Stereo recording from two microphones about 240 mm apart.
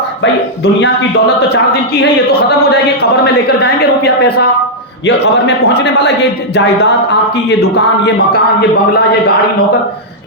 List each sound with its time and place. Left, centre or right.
0.2 s a man's voice: left